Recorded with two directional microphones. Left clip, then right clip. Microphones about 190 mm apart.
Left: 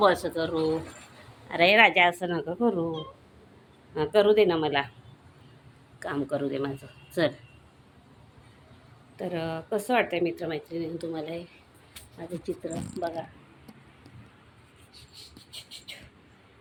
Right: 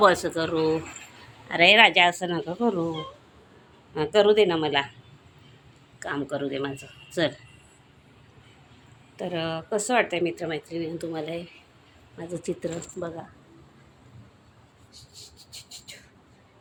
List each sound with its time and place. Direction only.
0.0 s speech: 5° right (ahead or behind)
6.0 s speech: 10° left (ahead or behind)
9.1 s speech: centre (ahead or behind)
12.1 s speech: 15° right (ahead or behind)
15.1 s a sound: 15° right (ahead or behind)